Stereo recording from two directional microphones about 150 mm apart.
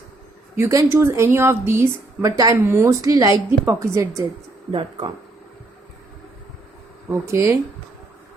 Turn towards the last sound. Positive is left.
turn(degrees=-20)  # may be behind; listen again after turning